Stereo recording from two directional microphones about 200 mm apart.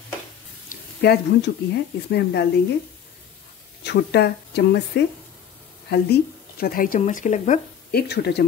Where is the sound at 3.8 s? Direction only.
55° left (ahead or behind).